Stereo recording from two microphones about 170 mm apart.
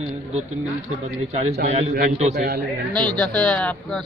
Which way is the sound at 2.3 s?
70° right (ahead or behind).